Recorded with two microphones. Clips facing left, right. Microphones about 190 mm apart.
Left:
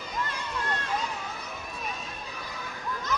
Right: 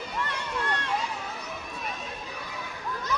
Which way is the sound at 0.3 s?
70° right (ahead or behind).